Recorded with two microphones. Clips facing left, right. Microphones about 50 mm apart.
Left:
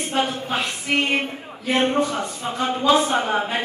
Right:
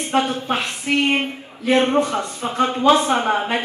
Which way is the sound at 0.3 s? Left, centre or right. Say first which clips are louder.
Right 2 dB; right.